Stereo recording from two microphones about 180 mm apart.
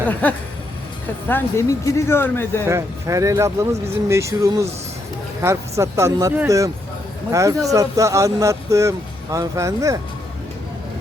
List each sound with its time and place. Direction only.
0.1 s speech: 10° left (ahead or behind)
2.6 s speech: 15° right (ahead or behind)